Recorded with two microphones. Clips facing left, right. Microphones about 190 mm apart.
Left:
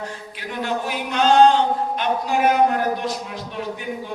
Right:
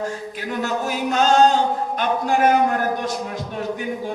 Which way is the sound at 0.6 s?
45° right (ahead or behind).